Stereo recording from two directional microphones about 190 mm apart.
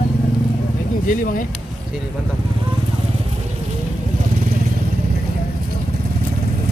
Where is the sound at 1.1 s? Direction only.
45° left (ahead or behind).